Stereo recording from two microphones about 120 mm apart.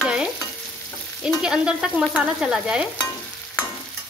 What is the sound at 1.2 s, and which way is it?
Frying, 5° right (ahead or behind).